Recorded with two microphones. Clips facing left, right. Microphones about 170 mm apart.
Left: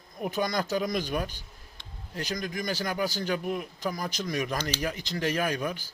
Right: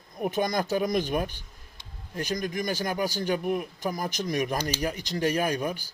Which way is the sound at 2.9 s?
45° right (ahead or behind).